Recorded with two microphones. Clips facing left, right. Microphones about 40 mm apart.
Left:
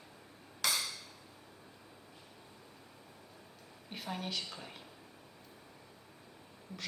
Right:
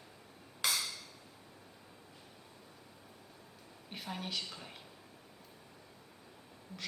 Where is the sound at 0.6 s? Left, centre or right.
Right.